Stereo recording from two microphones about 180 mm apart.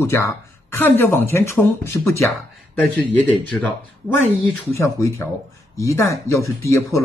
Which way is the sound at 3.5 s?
10° left (ahead or behind).